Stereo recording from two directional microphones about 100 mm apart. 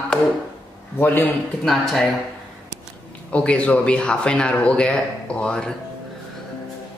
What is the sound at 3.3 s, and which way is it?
Speech, 10° left (ahead or behind).